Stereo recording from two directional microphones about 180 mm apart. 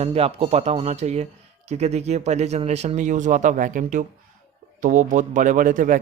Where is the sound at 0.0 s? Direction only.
35° right (ahead or behind).